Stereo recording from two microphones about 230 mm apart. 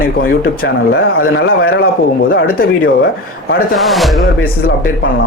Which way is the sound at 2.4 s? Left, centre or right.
Left.